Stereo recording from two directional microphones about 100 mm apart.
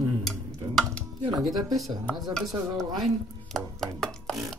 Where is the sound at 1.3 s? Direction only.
Centre (ahead or behind).